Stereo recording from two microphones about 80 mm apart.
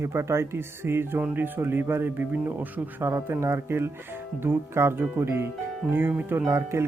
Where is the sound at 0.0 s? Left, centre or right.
Right.